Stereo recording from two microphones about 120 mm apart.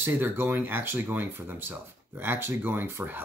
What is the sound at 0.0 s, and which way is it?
Speech, 20° right (ahead or behind).